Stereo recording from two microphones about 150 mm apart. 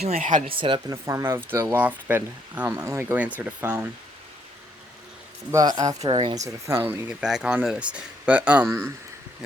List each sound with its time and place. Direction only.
0.0 s speech: 50° right (ahead or behind)
0.4 s speech: 35° right (ahead or behind)
1.0 s speech: 15° right (ahead or behind)
5.5 s speech: 25° right (ahead or behind)
6.4 s speech: 15° right (ahead or behind)